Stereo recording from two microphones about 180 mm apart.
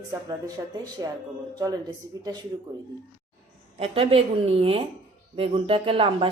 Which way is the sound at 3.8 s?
30° right (ahead or behind).